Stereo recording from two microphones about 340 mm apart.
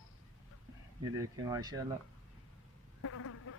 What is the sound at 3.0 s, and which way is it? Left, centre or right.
Insect, left.